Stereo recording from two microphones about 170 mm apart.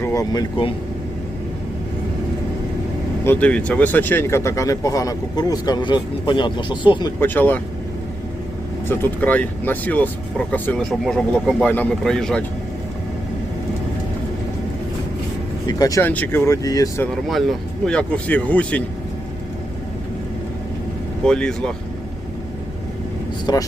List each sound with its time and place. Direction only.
0.0 s speech: 20° left (ahead or behind)
3.2 s speech: 10° left (ahead or behind); by 7.1 s 30° left (ahead or behind)
7.2 s speech: 10° left (ahead or behind)
8.9 s speech: 10° left (ahead or behind)
15.6 s speech: 20° left (ahead or behind)
17.1 s speech: centre (ahead or behind)
21.2 s speech: 5° left (ahead or behind)
23.5 s speech: 25° left (ahead or behind)